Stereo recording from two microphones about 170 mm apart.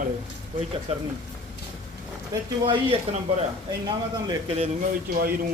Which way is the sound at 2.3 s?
30° right (ahead or behind).